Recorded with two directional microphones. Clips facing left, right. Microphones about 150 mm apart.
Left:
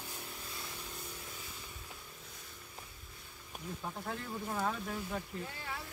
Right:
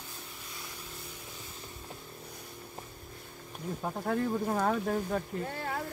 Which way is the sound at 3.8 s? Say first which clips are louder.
Right 12 dB; 50° right (ahead or behind).